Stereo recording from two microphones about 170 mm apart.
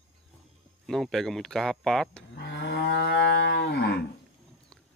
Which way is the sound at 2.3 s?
90° left.